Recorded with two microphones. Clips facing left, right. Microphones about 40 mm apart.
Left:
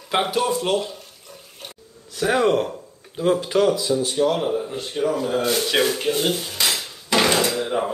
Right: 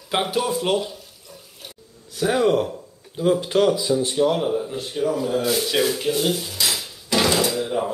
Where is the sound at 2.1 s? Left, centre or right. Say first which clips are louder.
Even; centre.